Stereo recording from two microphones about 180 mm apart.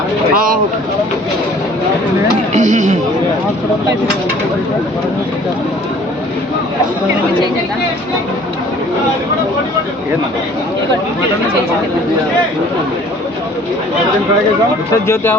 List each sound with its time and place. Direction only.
2.5 s speech: 40° right (ahead or behind)
15.0 s speech: 15° left (ahead or behind)